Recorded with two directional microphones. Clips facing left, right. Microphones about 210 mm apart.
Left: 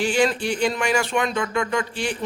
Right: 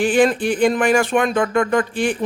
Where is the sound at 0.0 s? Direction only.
55° right (ahead or behind).